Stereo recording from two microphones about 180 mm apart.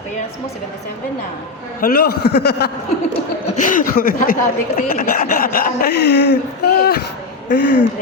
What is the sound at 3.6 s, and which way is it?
Speech, 50° left (ahead or behind).